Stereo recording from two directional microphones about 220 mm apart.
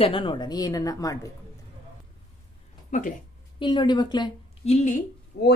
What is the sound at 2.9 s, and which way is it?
Speech, 35° left (ahead or behind).